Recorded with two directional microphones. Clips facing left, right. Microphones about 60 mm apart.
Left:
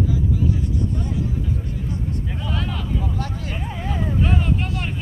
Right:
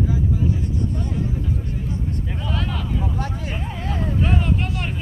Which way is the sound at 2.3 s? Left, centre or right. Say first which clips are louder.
Even; centre.